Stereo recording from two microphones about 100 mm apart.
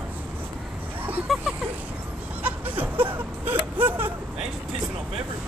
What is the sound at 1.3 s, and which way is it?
Speech, centre (ahead or behind).